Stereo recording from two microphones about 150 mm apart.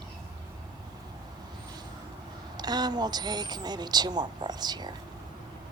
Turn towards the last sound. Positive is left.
turn(degrees=-30)  # may be behind; listen again after turning